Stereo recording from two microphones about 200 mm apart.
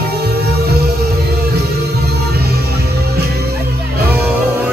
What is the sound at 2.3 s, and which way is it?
Music, 55° right (ahead or behind).